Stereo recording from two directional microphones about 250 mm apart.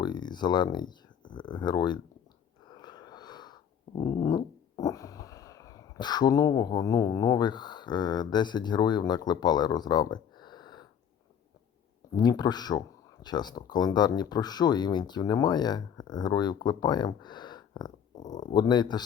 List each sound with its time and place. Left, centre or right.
0.0 s speech: centre
2.6 s a sound: centre
12.1 s speech: centre